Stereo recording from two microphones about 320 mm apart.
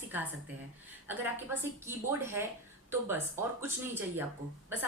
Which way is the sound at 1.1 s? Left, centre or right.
Centre.